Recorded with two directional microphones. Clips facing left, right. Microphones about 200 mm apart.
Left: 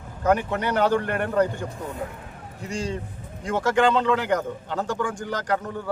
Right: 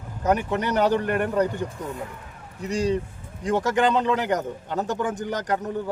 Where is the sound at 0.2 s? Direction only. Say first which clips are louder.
Left 1 dB; 20° right (ahead or behind).